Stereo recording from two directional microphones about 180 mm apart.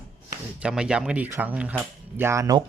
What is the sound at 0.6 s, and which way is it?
Speech, 5° right (ahead or behind).